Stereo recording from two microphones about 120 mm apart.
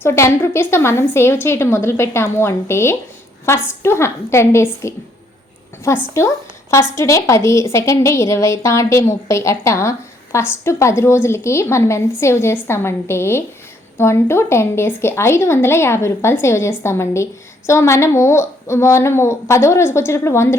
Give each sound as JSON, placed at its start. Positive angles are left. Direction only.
{"t": 0.0, "sound": "a woman's voice", "side_deg": 20}
{"t": 6.1, "sound": "a woman's voice", "side_deg": 25}